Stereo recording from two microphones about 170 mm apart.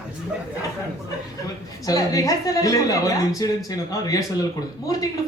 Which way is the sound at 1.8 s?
20° left (ahead or behind).